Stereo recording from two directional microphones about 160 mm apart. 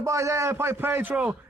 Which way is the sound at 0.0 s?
20° right (ahead or behind).